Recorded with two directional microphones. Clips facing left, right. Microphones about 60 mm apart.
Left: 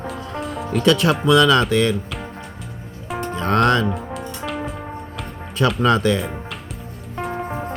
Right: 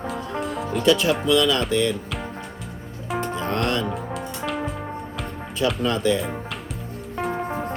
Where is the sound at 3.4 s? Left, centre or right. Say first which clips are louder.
Left 9 dB; left.